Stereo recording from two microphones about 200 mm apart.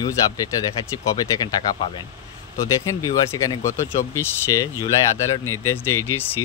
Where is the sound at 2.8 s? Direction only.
15° left (ahead or behind).